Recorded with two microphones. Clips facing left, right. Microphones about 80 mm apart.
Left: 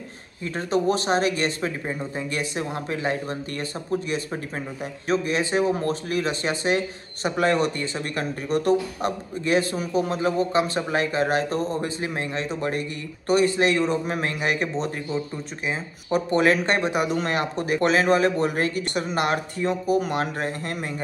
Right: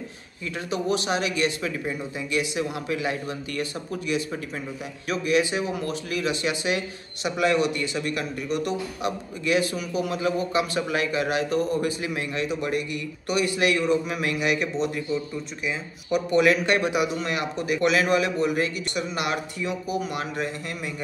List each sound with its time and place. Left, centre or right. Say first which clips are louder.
0.4 s speech: left 5 dB; left